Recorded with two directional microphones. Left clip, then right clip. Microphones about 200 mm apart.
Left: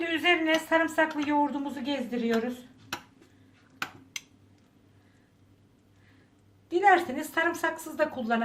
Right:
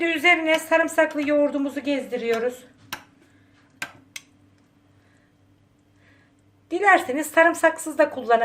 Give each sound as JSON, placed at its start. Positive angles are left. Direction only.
{"t": 0.0, "sound": "speech", "side_deg": -50}
{"t": 6.7, "sound": "speech", "side_deg": -50}